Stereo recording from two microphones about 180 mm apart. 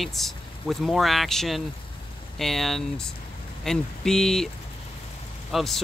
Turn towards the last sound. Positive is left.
turn(degrees=0)  # may be behind; listen again after turning